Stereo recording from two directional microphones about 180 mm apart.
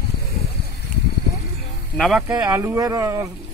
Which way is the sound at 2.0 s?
Centre (ahead or behind).